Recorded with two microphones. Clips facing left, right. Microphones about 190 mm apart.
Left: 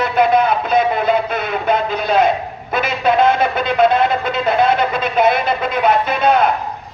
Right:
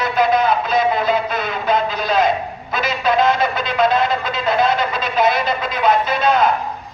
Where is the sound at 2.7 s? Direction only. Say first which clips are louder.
Left 3 dB; 55° left (ahead or behind).